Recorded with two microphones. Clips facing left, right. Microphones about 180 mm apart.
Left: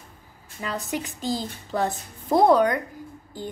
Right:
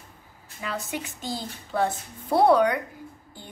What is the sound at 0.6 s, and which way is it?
A woman's voice, 40° left (ahead or behind).